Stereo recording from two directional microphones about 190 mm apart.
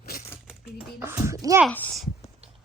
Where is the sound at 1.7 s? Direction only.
5° left (ahead or behind).